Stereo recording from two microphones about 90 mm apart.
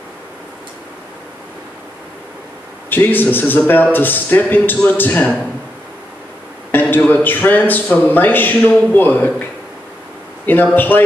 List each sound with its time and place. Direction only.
2.9 s a man's voice: 20° left (ahead or behind)
6.7 s a man's voice: 20° left (ahead or behind)
10.4 s a man's voice: 20° left (ahead or behind)